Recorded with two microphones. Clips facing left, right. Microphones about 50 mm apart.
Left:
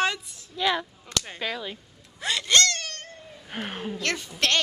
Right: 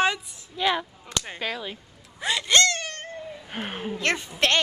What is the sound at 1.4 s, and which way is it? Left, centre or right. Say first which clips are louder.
Wail: even; centre.